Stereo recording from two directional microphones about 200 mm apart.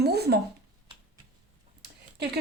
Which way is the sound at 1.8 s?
55° right (ahead or behind).